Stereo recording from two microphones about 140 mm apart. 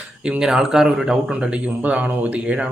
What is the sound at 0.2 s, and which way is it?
Speech, 5° right (ahead or behind).